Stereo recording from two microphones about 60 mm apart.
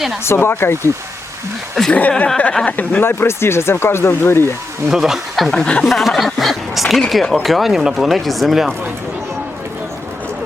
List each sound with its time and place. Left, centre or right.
0.3 s speech: left
1.9 s speech: left
3.0 s speech: left
4.9 s speech: centre
5.6 s speech: left
5.9 s speech: centre